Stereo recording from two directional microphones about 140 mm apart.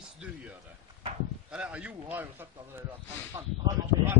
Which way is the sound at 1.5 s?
10° right (ahead or behind).